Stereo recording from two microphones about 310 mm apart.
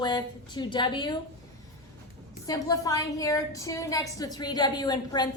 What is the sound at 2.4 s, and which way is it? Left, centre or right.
A woman's voice, centre.